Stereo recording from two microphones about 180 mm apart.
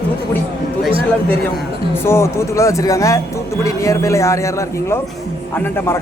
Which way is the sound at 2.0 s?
15° left (ahead or behind).